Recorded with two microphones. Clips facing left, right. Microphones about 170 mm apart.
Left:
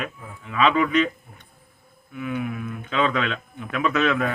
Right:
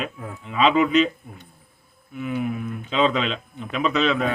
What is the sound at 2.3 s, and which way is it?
Speech, 20° right (ahead or behind).